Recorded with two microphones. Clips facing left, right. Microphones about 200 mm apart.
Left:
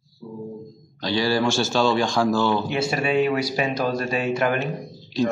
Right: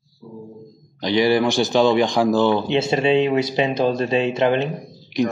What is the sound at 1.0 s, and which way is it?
Speech, 20° right (ahead or behind).